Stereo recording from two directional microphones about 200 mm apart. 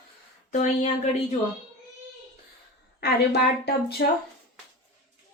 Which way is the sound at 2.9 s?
55° left (ahead or behind).